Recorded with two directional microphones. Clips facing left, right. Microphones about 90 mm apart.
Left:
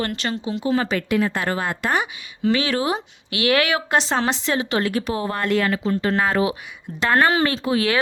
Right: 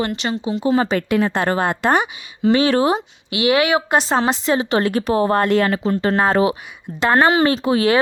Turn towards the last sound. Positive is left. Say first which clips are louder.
# right 5 dB
turn(degrees=-25)  # may be behind; listen again after turning